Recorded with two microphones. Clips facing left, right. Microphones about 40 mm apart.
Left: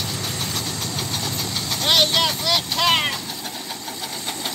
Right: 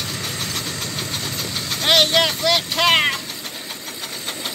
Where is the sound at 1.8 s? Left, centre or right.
Right.